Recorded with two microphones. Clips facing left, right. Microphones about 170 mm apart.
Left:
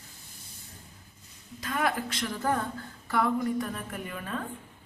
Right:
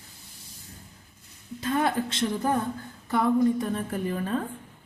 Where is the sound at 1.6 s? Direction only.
30° right (ahead or behind).